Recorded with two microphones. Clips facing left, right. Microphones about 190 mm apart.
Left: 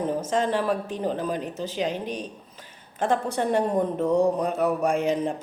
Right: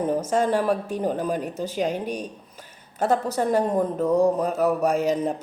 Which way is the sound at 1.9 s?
45° right (ahead or behind).